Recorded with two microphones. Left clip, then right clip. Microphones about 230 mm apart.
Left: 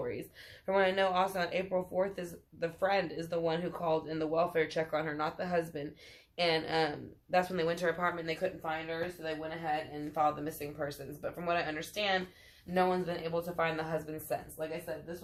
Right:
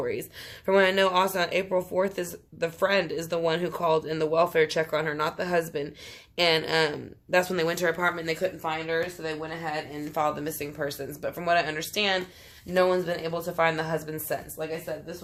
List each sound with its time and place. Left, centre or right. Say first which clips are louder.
0.6 s speech: right 8 dB; right